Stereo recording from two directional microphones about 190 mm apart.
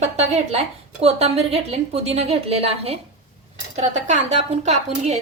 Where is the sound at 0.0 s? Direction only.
35° right (ahead or behind).